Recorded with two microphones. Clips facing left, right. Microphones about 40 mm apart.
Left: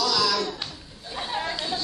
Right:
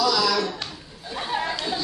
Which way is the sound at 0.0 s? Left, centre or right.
Centre.